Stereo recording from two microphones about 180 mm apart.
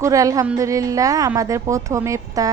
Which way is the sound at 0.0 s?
20° right (ahead or behind).